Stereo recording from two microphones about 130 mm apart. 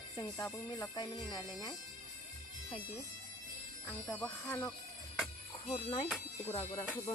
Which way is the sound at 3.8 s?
10° left (ahead or behind).